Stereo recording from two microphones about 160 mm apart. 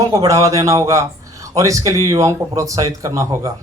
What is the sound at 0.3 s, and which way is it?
A man's voice, 20° right (ahead or behind).